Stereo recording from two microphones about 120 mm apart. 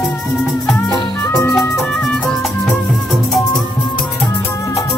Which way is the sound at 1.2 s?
25° left (ahead or behind).